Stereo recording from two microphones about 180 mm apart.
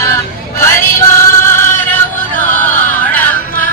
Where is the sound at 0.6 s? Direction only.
15° left (ahead or behind).